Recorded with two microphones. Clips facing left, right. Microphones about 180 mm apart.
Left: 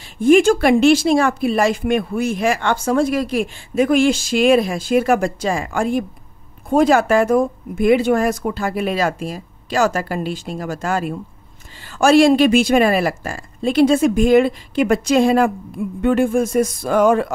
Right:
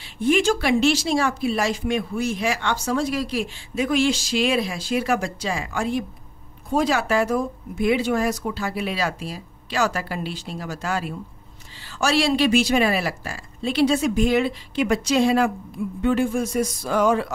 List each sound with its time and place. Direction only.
0.2 s speech: 50° left (ahead or behind)